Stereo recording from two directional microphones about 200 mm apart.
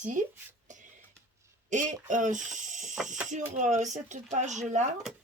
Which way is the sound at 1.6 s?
40° right (ahead or behind).